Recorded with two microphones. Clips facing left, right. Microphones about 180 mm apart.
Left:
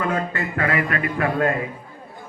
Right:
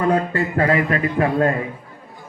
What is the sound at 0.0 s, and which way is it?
A man's voice, 35° right (ahead or behind).